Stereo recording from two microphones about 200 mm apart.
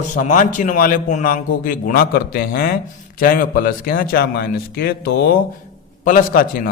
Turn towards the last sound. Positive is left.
turn(degrees=45)  # may be behind; listen again after turning